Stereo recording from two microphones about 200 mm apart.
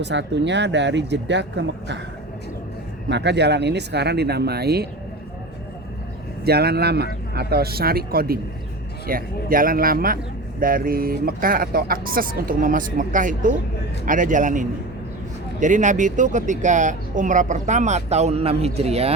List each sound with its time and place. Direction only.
0.0 s speech: 60° right (ahead or behind)
3.1 s speech: 60° right (ahead or behind)
6.4 s speech: 50° right (ahead or behind); by 19.1 s 30° right (ahead or behind)